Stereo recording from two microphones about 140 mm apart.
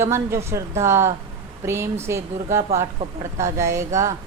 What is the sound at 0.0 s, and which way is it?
Speech, 20° right (ahead or behind).